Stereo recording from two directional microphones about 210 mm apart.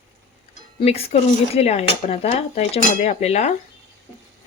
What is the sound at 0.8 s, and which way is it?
Speech, 30° left (ahead or behind).